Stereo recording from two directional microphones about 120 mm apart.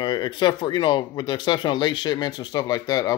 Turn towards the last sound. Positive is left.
turn(degrees=30)  # may be behind; listen again after turning